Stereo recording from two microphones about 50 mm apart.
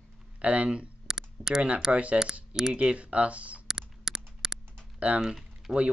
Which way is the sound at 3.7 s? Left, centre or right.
Centre.